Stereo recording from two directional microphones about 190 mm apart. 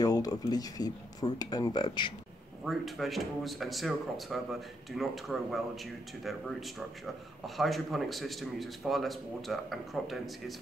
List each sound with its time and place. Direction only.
0.0 s speech: 20° left (ahead or behind)
2.6 s speech: centre (ahead or behind)